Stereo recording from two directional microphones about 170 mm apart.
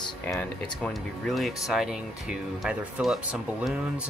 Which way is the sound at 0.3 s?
5° left (ahead or behind).